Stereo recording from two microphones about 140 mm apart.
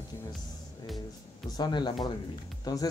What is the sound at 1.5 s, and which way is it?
Speech, 30° left (ahead or behind).